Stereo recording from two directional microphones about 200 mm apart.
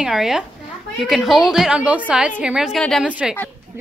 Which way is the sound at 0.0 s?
Centre (ahead or behind).